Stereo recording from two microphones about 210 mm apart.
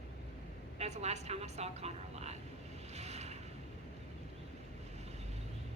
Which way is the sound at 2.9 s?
30° right (ahead or behind).